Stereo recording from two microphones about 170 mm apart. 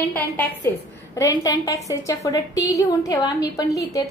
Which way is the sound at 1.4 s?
20° left (ahead or behind).